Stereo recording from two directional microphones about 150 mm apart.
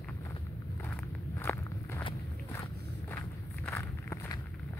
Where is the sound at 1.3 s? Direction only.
15° left (ahead or behind).